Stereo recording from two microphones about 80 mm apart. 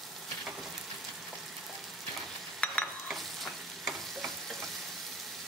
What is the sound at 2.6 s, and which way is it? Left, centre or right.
Stir, centre.